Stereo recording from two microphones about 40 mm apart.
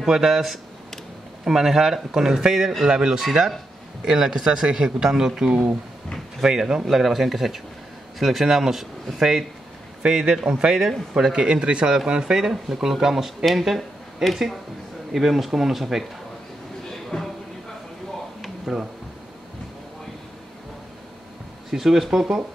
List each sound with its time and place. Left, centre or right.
0.0 s speech: centre
4.5 s speech: right
4.8 s speech: centre
10.0 s speech: centre
10.7 s speech: centre
11.3 s speech: right; by 16.1 s centre
18.7 s speech: centre
21.6 s speech: centre